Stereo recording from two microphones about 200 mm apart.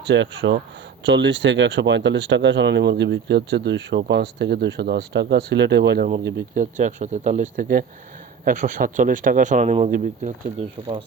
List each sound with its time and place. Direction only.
0.0 s speech: 60° right (ahead or behind); by 11.0 s 30° right (ahead or behind)